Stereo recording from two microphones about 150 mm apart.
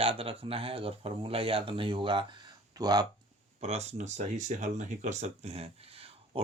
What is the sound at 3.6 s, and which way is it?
Speech, 45° right (ahead or behind).